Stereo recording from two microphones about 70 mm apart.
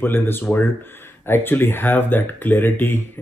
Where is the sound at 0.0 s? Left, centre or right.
Left.